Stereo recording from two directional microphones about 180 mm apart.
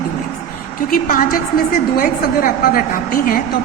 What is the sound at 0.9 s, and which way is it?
Speech, 50° left (ahead or behind).